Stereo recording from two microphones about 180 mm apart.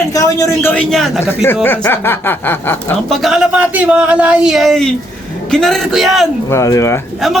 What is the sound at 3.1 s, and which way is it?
Speech, centre (ahead or behind).